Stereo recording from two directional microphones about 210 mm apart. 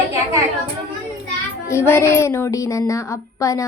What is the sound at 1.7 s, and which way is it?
Speech, 10° left (ahead or behind).